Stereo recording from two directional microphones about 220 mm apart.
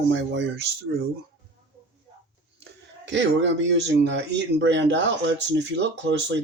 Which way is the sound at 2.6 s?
55° right (ahead or behind).